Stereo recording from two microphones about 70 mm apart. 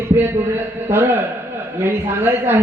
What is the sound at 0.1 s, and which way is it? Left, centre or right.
A man's voice, right.